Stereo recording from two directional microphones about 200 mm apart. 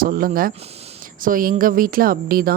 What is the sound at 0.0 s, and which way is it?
Speech, 45° right (ahead or behind).